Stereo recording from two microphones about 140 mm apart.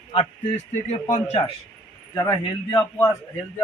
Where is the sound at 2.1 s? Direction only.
30° left (ahead or behind).